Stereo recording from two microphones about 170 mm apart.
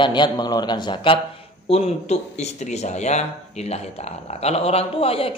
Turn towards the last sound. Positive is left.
turn(degrees=35)  # may be behind; listen again after turning